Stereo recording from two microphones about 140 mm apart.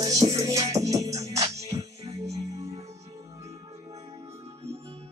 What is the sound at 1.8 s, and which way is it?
Music, 50° right (ahead or behind).